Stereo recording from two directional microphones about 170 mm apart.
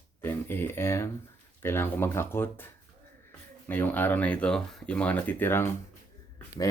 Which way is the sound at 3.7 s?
10° left (ahead or behind).